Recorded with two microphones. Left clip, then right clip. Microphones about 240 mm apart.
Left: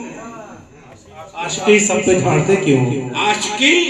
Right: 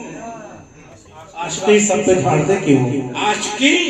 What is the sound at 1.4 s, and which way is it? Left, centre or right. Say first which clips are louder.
Speech: left 1 dB; left.